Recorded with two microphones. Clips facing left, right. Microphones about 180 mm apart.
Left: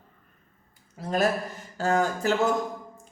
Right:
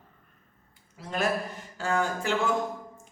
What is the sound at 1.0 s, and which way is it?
Speech, 40° left (ahead or behind).